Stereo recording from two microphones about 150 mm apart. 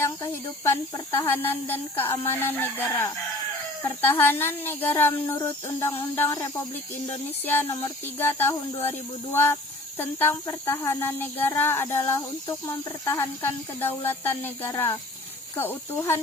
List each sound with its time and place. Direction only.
0.0 s speech: 15° left (ahead or behind)